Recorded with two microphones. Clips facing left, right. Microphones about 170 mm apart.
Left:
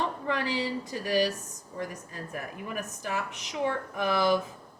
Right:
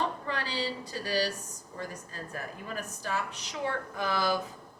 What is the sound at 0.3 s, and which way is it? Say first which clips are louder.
Speech: left 4 dB; 20° left (ahead or behind).